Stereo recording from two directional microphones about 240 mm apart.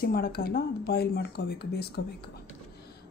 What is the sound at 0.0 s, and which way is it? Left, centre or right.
Speech, left.